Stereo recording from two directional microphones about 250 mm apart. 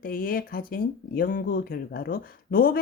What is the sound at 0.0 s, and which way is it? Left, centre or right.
Speech, left.